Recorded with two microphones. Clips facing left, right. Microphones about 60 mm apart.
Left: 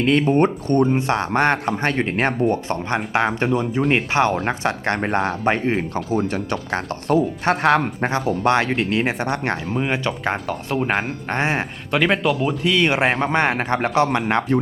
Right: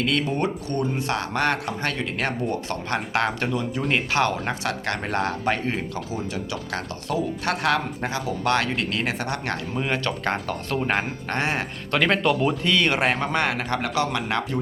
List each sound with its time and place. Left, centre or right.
0.0 s a man's voice: left
6.1 s speech: left
6.7 s a man's voice: left
9.7 s speech: centre
11.9 s speech: centre; by 14.6 s left